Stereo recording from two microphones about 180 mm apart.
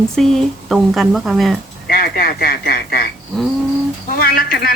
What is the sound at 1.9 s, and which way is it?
Speech, 55° left (ahead or behind).